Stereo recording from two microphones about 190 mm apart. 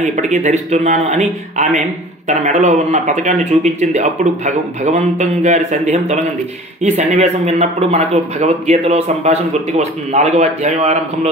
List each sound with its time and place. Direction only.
0.0 s speech: 40° right (ahead or behind)